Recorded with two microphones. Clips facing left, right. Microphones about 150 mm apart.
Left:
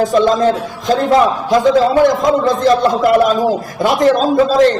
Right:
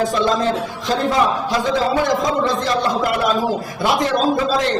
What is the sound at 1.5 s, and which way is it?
Speech, 50° left (ahead or behind).